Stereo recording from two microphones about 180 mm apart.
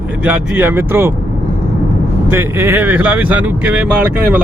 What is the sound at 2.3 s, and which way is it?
Speech, 15° right (ahead or behind).